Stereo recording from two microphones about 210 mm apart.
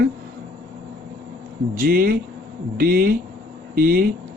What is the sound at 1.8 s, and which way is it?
A man's voice, 40° right (ahead or behind).